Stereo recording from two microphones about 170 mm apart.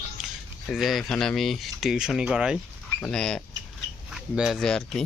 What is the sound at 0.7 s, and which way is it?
Speech, centre (ahead or behind).